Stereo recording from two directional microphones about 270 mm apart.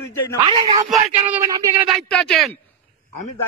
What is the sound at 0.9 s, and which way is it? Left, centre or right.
Speech, centre.